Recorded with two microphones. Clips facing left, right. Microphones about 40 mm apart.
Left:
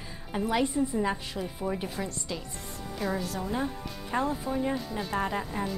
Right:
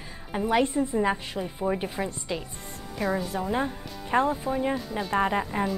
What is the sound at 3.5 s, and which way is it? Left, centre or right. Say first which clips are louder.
A woman's voice: right 3 dB; right.